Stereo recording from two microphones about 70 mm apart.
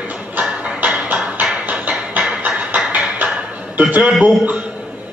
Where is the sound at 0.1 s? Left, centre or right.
Right.